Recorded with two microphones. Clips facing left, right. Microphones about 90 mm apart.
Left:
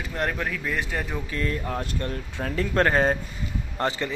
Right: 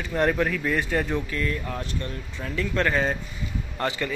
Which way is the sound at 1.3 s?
30° left (ahead or behind).